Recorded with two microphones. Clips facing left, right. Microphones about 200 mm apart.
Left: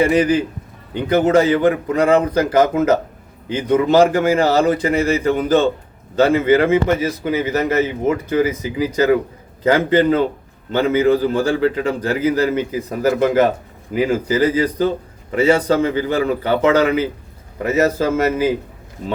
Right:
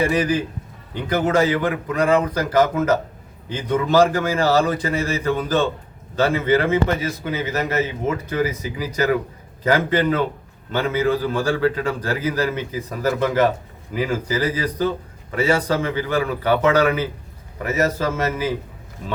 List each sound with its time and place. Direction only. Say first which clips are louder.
0.0 s a man's voice: left 5 dB; 25° left (ahead or behind)